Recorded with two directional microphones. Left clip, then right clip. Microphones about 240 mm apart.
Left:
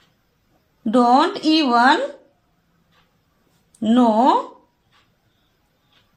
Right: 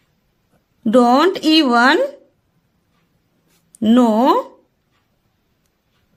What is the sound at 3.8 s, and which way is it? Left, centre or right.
Speech, right.